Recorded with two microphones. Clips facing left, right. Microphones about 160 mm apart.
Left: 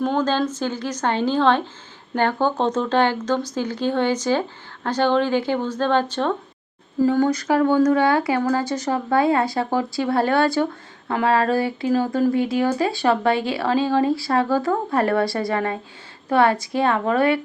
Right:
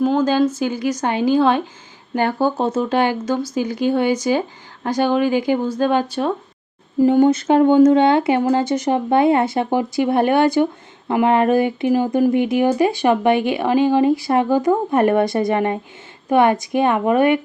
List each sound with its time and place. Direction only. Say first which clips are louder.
0.0 s speech: right 5 dB; 5° right (ahead or behind)